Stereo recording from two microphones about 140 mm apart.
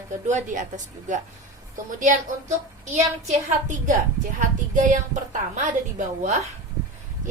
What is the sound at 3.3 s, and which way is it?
Speech, 50° right (ahead or behind).